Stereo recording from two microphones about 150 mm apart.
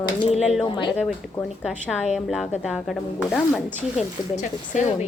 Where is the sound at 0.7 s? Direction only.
30° left (ahead or behind).